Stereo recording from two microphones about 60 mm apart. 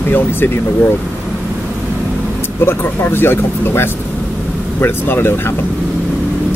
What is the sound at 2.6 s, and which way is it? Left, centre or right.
Speech, left.